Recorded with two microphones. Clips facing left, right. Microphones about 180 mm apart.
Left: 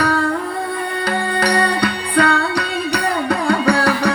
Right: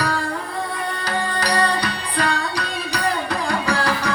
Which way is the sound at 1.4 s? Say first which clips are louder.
Left 4 dB; 60° left (ahead or behind).